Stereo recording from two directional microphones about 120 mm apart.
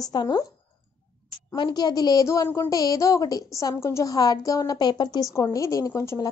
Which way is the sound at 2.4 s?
20° left (ahead or behind).